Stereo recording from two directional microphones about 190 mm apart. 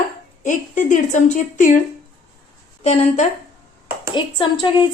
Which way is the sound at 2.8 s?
35° left (ahead or behind).